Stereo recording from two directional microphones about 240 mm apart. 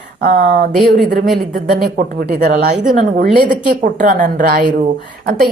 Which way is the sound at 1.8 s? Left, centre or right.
Right.